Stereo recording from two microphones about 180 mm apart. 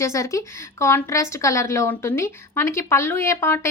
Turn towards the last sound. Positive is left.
turn(degrees=15)  # may be behind; listen again after turning